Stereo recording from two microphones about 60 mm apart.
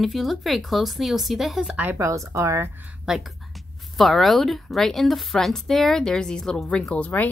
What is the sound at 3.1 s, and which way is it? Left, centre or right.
Speech, centre.